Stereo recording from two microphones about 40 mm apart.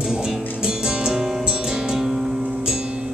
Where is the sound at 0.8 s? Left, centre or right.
Centre.